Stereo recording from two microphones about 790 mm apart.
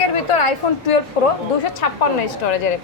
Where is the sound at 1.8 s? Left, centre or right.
Left.